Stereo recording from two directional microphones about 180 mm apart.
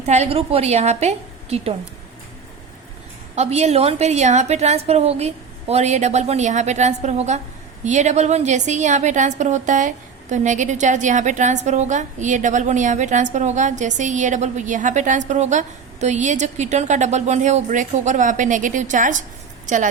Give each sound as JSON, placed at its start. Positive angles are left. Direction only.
{"t": 0.0, "sound": "a woman's voice", "side_deg": -35}
{"t": 3.3, "sound": "a woman's voice", "side_deg": -40}